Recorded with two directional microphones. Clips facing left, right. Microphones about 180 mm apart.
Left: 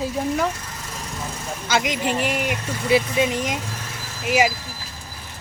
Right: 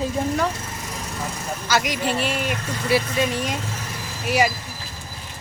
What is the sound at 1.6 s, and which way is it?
Speech, 20° left (ahead or behind).